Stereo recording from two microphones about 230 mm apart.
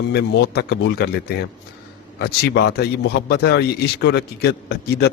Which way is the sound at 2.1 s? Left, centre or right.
Left.